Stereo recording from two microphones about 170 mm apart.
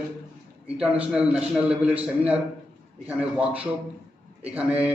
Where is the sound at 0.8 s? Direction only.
5° right (ahead or behind).